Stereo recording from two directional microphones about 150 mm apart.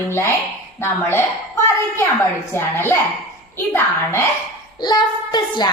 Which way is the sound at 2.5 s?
15° left (ahead or behind).